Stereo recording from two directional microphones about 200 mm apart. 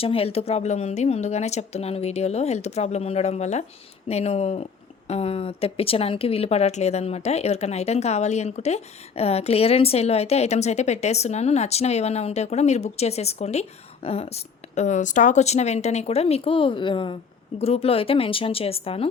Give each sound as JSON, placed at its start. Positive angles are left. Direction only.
{"t": 0.0, "sound": "speech", "side_deg": 30}